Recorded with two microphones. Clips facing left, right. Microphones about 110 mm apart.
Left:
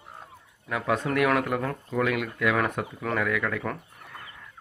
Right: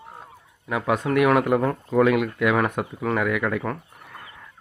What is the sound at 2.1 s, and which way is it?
Speech, 15° right (ahead or behind).